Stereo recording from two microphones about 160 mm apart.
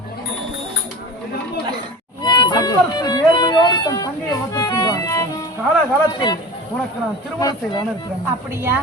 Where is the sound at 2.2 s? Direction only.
25° left (ahead or behind).